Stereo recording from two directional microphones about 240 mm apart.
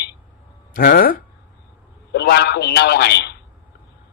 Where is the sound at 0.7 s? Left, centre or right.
Left.